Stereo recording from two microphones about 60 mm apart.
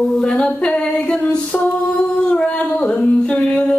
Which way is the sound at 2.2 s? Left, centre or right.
Centre.